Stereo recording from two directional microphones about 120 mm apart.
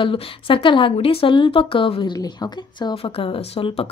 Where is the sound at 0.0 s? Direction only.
45° left (ahead or behind).